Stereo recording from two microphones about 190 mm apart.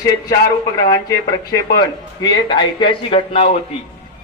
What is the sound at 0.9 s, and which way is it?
A man's voice, 20° left (ahead or behind).